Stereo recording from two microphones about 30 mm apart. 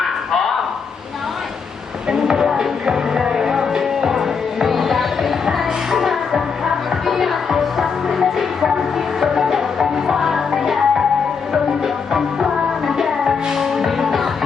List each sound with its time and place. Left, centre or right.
0.3 s a sound: centre
2.0 s music: right
4.6 s music: centre
12.1 s music: centre